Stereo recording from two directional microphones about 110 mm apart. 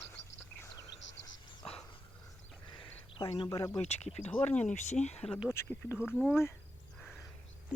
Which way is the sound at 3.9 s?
80° left.